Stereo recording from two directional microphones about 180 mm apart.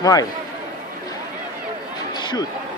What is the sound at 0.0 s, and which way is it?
Speech, 20° left (ahead or behind).